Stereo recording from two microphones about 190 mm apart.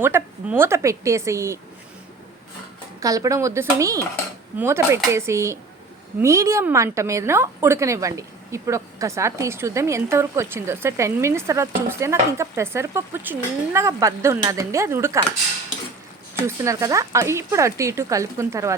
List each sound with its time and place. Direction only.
0.0 s a woman's voice: 10° right (ahead or behind)
3.0 s a woman's voice: 15° right (ahead or behind)
16.4 s a woman's voice: 15° right (ahead or behind)